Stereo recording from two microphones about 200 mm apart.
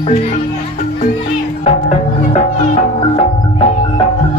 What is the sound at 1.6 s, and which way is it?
Music, 30° left (ahead or behind).